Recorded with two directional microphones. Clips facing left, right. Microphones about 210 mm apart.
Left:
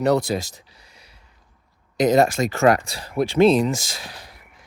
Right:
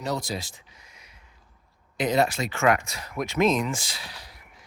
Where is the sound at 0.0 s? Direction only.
60° left (ahead or behind).